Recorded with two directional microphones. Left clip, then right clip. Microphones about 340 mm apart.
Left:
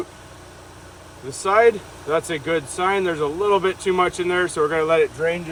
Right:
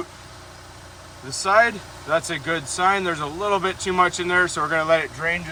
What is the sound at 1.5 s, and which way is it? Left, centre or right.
Speech, right.